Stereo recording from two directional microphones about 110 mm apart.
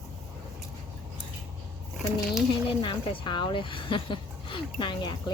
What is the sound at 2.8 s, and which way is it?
Speech, 50° left (ahead or behind).